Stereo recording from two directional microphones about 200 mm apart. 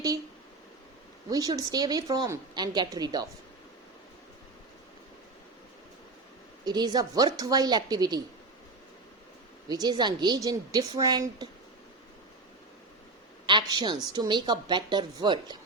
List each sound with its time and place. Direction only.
1.3 s a woman's voice: 20° right (ahead or behind)
6.7 s a woman's voice: 20° right (ahead or behind)
9.6 s a woman's voice: 20° right (ahead or behind)
13.5 s a woman's voice: 20° right (ahead or behind)